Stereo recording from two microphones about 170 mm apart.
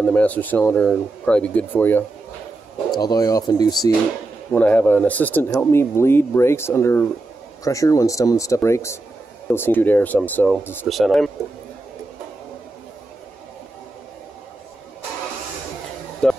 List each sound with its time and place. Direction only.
0.0 s speech: 10° left (ahead or behind)
4.5 s speech: 10° left (ahead or behind)
10.9 s speech: centre (ahead or behind)
16.2 s a sound: 5° left (ahead or behind)